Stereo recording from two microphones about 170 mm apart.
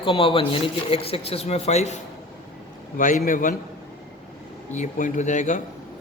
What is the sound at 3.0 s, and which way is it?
Speech, 50° left (ahead or behind).